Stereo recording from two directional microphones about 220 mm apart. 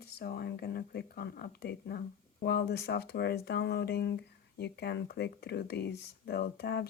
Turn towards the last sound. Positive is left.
turn(degrees=45)  # may be behind; listen again after turning